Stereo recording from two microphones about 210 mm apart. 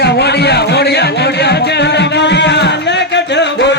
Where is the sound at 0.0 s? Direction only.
50° left (ahead or behind).